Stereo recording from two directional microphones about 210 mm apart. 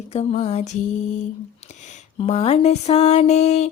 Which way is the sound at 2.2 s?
30° left (ahead or behind).